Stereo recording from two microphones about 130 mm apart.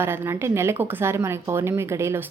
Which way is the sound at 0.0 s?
20° right (ahead or behind).